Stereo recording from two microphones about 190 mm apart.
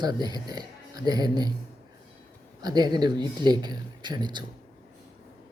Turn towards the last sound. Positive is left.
turn(degrees=-25)  # may be behind; listen again after turning